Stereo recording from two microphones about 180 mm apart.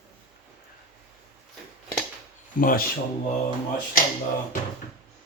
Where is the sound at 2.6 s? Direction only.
50° left (ahead or behind).